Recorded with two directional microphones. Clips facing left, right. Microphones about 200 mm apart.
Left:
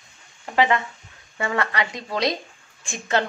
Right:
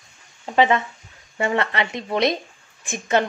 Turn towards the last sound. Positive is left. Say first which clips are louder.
# right 3 dB
turn(degrees=-20)  # may be behind; listen again after turning